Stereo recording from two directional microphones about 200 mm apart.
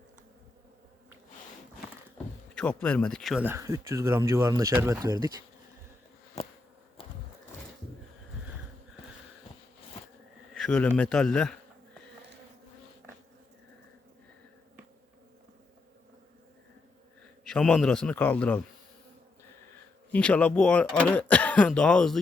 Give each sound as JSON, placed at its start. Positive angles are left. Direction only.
{"t": 2.6, "sound": "speech", "side_deg": 5}
{"t": 3.4, "sound": "speech", "side_deg": -15}
{"t": 10.5, "sound": "speech", "side_deg": 5}
{"t": 17.4, "sound": "speech", "side_deg": 5}
{"t": 20.1, "sound": "speech", "side_deg": 5}